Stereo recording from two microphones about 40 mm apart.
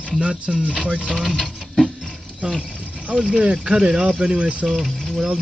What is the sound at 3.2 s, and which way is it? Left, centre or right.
Speech, right.